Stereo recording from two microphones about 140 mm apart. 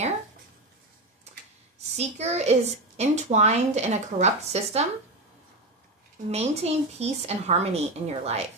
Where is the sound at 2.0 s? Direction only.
50° right (ahead or behind).